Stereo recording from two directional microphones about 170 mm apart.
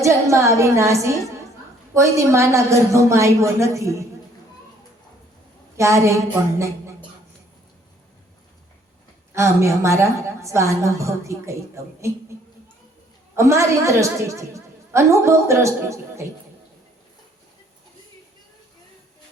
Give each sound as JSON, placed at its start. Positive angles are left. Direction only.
{"t": 0.0, "sound": "a woman's voice", "side_deg": -15}
{"t": 5.7, "sound": "a woman's voice", "side_deg": -15}
{"t": 9.3, "sound": "a woman's voice", "side_deg": -15}
{"t": 13.3, "sound": "a woman's voice", "side_deg": -15}